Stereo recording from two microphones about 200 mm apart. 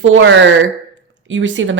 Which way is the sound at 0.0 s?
75° right (ahead or behind).